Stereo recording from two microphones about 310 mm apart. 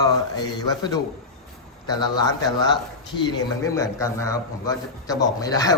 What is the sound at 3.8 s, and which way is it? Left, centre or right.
A man's voice, centre.